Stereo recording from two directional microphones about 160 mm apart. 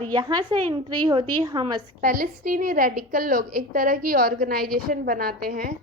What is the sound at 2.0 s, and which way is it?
A woman's voice, 60° right (ahead or behind).